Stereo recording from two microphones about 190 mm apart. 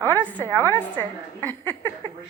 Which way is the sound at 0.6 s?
10° left (ahead or behind).